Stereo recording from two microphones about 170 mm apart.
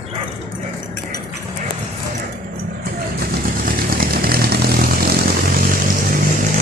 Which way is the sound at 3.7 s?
60° right (ahead or behind).